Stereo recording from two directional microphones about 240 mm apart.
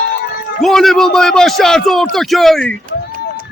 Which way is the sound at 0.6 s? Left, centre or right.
Centre.